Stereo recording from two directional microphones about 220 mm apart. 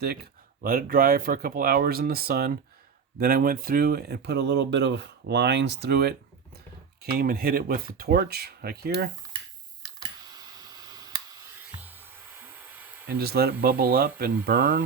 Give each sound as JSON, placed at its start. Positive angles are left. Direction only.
{"t": 0.6, "sound": "speech", "side_deg": -40}
{"t": 10.0, "sound": "tick", "side_deg": -15}
{"t": 13.1, "sound": "speech", "side_deg": -45}